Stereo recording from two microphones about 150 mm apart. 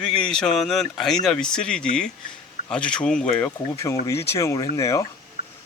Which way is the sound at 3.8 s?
20° left (ahead or behind).